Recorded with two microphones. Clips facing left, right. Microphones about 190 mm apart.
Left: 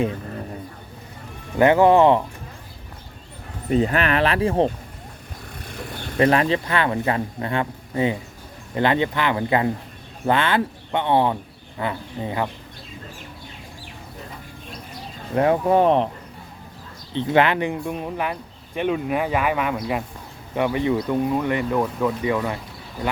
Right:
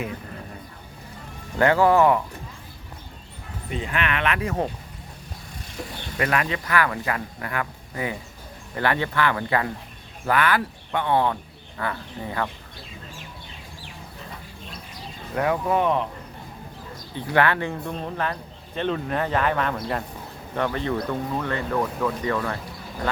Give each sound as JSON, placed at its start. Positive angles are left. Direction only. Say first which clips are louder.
{"t": 1.5, "sound": "speech", "louder": "left 4 dB", "side_deg": 20}
{"t": 3.7, "sound": "speech", "louder": "left 8 dB", "side_deg": 40}
{"t": 6.1, "sound": "speech", "louder": "left 7 dB", "side_deg": 30}
{"t": 15.4, "sound": "speech", "louder": "left 5 dB", "side_deg": 30}
{"t": 17.2, "sound": "speech", "louder": "left 3 dB", "side_deg": 20}